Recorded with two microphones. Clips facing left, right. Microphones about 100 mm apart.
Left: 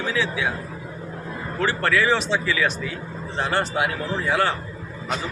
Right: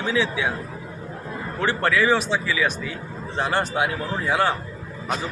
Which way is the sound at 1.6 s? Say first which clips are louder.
Even; 20° right (ahead or behind).